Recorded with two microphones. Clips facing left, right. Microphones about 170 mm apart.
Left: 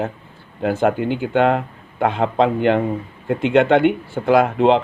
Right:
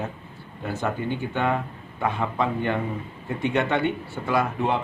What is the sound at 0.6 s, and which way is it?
Speech, 85° left.